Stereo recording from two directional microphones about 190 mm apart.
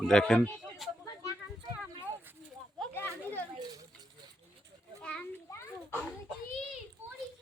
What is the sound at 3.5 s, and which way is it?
Children playing, 20° right (ahead or behind).